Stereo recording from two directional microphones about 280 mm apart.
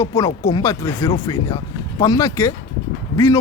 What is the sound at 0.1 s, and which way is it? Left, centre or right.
Speech, left.